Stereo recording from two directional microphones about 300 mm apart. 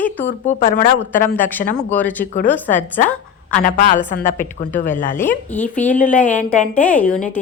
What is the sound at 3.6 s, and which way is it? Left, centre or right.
Speech, left.